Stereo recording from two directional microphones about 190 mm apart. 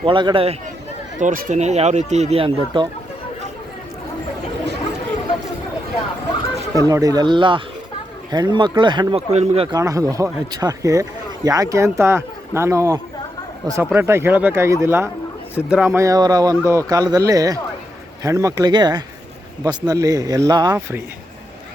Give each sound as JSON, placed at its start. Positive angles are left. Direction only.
{"t": 0.0, "sound": "speech", "side_deg": -25}
{"t": 1.2, "sound": "speech", "side_deg": -40}
{"t": 6.7, "sound": "speech", "side_deg": -20}
{"t": 9.7, "sound": "speech", "side_deg": -15}